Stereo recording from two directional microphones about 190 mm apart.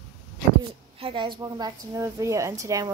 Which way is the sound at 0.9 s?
30° right (ahead or behind).